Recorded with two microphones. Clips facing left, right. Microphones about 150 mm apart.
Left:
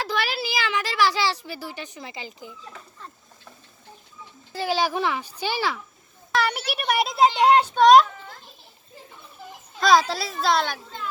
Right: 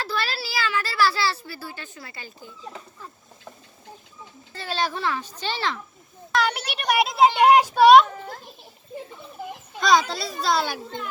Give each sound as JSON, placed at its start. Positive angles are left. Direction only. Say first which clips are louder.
{"t": 0.0, "sound": "a woman's voice", "louder": "left 2 dB", "side_deg": 15}
{"t": 4.5, "sound": "a child's voice", "louder": "left 4 dB", "side_deg": 10}
{"t": 7.4, "sound": "a child's voice", "louder": "right 1 dB", "side_deg": -10}
{"t": 8.1, "sound": "a sound", "louder": "right 6 dB", "side_deg": -40}
{"t": 9.8, "sound": "a child's voice", "louder": "left 1 dB", "side_deg": 0}